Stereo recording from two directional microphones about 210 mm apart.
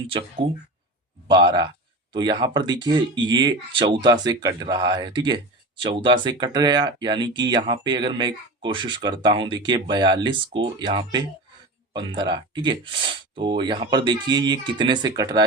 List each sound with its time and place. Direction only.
0.4 s speech: 25° right (ahead or behind)